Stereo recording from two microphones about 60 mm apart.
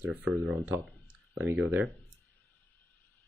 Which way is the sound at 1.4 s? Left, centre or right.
Right.